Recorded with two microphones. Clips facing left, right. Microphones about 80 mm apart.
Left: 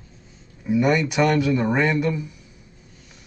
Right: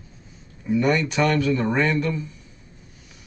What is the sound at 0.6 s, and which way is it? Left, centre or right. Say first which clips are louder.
Speech: left 1 dB; centre.